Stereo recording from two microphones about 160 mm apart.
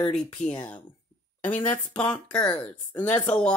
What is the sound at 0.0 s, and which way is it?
Speech, 5° left (ahead or behind).